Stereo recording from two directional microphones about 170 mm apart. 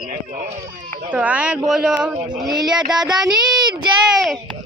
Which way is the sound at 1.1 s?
10° right (ahead or behind).